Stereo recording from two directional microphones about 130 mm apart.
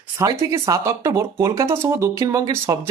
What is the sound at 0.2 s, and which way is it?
Speech, 25° right (ahead or behind).